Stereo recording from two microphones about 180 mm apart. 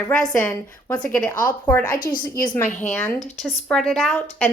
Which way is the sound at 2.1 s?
25° left (ahead or behind).